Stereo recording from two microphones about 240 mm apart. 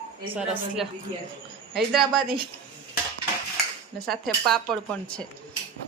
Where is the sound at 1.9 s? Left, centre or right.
Centre.